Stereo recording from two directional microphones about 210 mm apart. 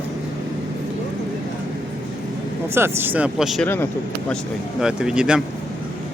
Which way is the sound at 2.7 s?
10° right (ahead or behind).